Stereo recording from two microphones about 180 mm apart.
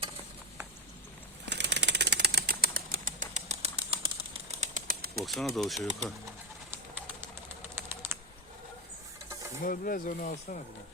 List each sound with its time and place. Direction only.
1.5 s a sound: 70° right (ahead or behind); by 4.7 s 30° right (ahead or behind)
4.7 s bird flight: 55° right (ahead or behind)
5.2 s speech: centre (ahead or behind)
7.8 s typing: 10° right (ahead or behind)
9.6 s speech: 50° left (ahead or behind)